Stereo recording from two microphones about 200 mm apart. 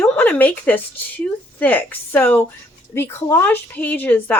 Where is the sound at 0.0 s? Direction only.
10° left (ahead or behind).